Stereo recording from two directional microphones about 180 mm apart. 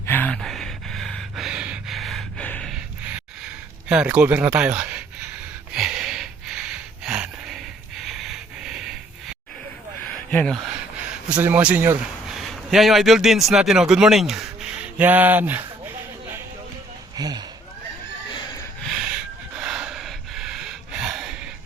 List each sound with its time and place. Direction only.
0.0 s gasp: 10° left (ahead or behind); by 3.2 s 5° right (ahead or behind)
3.8 s speech: 5° right (ahead or behind)
5.7 s a sound: centre (ahead or behind)
10.1 s a sound: 5° left (ahead or behind)
11.3 s a man's voice: 10° right (ahead or behind)
17.2 s speech: 20° right (ahead or behind)
18.3 s neigh: 25° left (ahead or behind)
18.8 s a sound: centre (ahead or behind)
19.5 s gasp: 5° right (ahead or behind)